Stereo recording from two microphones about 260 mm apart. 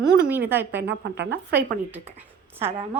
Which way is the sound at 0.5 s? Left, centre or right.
Centre.